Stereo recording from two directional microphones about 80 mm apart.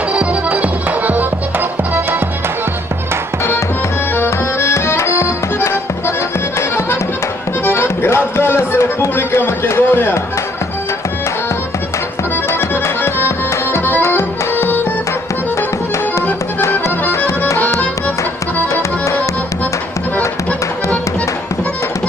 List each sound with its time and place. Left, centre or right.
0.1 s music: centre
4.2 s accordion: left
7.6 s music: left
12.5 s accordion: left
13.7 s music: left
14.0 s tabla: left